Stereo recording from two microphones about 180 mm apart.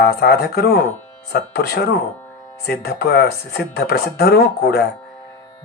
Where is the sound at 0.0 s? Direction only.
60° left (ahead or behind).